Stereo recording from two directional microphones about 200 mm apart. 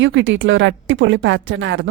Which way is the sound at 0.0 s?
70° right (ahead or behind).